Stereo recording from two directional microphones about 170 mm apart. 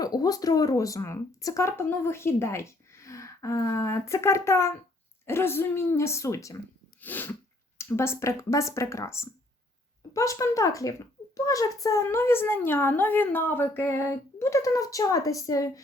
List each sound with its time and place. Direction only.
0.0 s a child's voice: 20° left (ahead or behind)